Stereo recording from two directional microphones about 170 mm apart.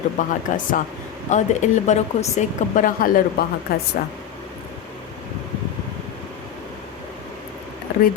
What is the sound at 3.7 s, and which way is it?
Speech, 65° left (ahead or behind).